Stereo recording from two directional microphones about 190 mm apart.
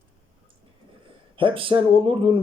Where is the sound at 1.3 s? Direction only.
25° right (ahead or behind).